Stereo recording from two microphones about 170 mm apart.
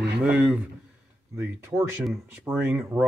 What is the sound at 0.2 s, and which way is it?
Speech, 10° right (ahead or behind).